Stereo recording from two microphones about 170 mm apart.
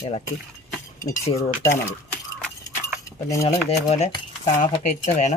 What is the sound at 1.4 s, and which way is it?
Cutlery, 15° left (ahead or behind).